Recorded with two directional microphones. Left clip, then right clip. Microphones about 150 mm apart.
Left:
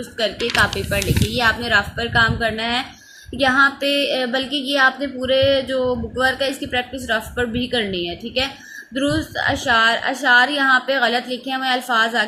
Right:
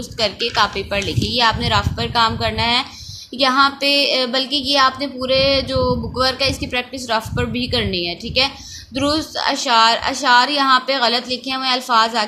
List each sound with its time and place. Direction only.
0.2 s a woman's voice: 15° right (ahead or behind)